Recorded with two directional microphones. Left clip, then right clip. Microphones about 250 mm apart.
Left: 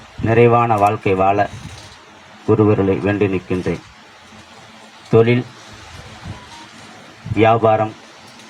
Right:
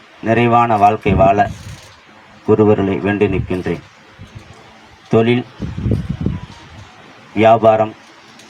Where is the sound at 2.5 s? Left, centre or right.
Right.